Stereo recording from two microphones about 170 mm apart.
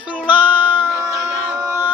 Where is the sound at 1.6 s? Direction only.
15° right (ahead or behind).